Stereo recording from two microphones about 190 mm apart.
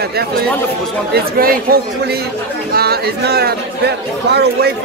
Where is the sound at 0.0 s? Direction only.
55° right (ahead or behind).